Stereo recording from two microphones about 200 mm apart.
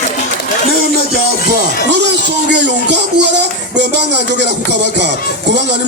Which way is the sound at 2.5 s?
60° right (ahead or behind).